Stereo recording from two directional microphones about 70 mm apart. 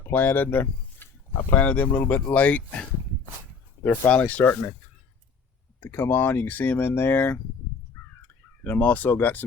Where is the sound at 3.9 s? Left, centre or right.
Centre.